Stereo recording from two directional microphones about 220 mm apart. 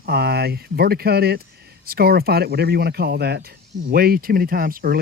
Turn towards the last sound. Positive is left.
turn(degrees=-40)  # may be behind; listen again after turning